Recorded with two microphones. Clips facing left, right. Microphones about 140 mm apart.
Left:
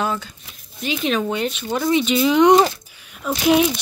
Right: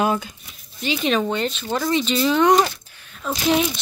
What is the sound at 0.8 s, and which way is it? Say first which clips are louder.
A woman's voice: even; centre (ahead or behind).